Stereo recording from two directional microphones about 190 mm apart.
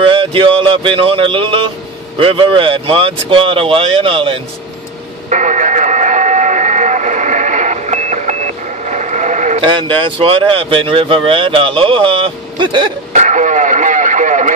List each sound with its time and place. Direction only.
0.0 s a sound: 25° right (ahead or behind)
2.1 s speech: 25° right (ahead or behind)
5.3 s radio: 40° right (ahead or behind)
9.6 s speech: 25° right (ahead or behind)
13.1 s speech: 40° right (ahead or behind)